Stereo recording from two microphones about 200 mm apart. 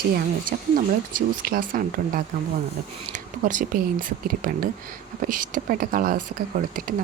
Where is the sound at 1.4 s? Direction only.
45° right (ahead or behind).